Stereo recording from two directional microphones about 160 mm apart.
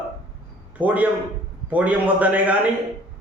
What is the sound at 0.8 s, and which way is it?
Speech, 10° right (ahead or behind).